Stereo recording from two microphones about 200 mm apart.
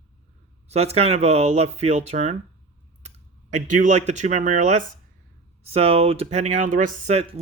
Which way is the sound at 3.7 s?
40° right (ahead or behind).